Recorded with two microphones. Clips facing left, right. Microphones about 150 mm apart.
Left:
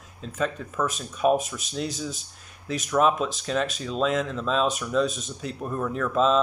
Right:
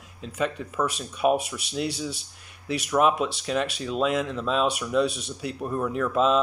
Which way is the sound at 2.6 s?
65° right (ahead or behind).